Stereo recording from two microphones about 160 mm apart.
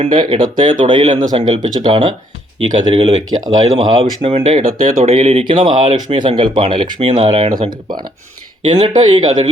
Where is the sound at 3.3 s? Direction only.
35° right (ahead or behind).